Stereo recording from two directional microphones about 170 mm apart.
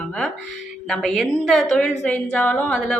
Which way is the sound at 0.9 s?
Centre (ahead or behind).